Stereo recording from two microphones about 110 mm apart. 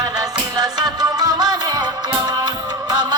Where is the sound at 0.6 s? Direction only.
40° right (ahead or behind).